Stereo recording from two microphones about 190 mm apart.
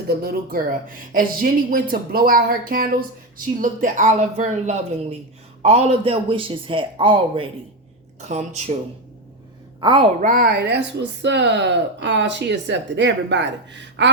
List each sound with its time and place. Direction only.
0.1 s a man's voice: 55° right (ahead or behind); by 8.7 s 35° right (ahead or behind)
9.8 s a man's voice: 25° right (ahead or behind)
10.2 s speech: 45° right (ahead or behind); by 14.1 s 70° right (ahead or behind)